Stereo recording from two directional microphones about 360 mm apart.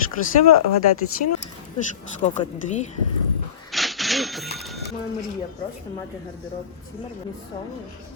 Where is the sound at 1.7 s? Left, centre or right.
Centre.